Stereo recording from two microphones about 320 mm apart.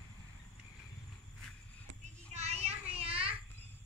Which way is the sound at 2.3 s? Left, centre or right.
Centre.